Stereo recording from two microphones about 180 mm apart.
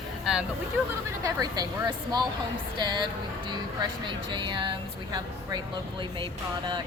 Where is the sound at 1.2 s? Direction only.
20° right (ahead or behind).